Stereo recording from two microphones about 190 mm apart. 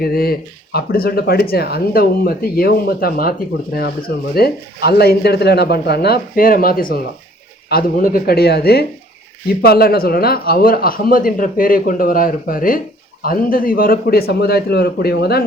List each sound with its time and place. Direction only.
0.0 s speech: 55° left (ahead or behind)